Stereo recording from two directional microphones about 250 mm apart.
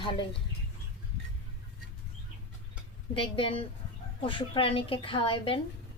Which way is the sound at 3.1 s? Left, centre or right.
Left.